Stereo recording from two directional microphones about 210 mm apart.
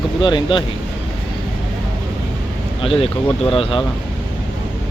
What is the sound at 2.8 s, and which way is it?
Speech, 25° left (ahead or behind).